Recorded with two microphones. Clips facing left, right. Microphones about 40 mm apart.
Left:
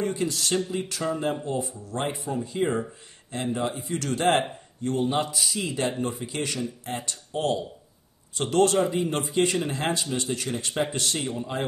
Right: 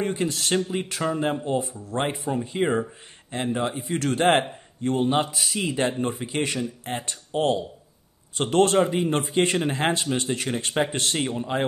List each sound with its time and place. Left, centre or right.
0.0 s speech: right